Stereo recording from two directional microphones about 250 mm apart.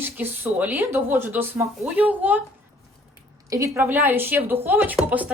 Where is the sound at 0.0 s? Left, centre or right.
Centre.